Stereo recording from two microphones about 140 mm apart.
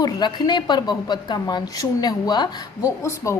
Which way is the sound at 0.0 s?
30° left (ahead or behind).